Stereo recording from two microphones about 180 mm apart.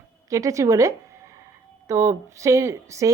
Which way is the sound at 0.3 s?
20° right (ahead or behind).